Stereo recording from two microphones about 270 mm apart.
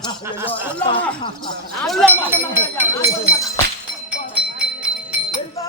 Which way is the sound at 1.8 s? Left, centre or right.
Centre.